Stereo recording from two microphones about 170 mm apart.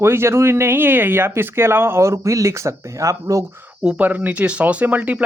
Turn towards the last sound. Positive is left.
turn(degrees=-10)  # may be behind; listen again after turning